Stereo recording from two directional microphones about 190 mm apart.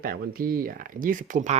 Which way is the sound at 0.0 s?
50° right (ahead or behind).